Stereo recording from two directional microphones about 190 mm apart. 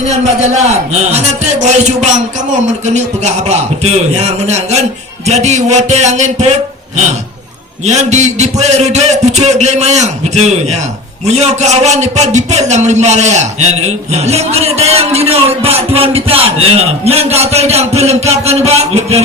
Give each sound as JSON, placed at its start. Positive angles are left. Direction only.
{"t": 1.6, "sound": "a man's voice", "side_deg": -40}
{"t": 3.8, "sound": "a man's voice", "side_deg": -35}
{"t": 7.9, "sound": "a man's voice", "side_deg": -35}